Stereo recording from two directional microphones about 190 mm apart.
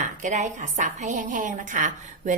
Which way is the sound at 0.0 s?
40° right (ahead or behind).